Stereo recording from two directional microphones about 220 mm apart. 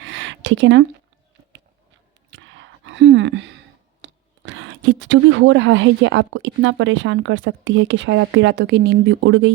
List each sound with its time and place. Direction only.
0.0 s a sound: 55° right (ahead or behind)
2.3 s whispering: 60° right (ahead or behind)
4.0 s speech: 60° right (ahead or behind)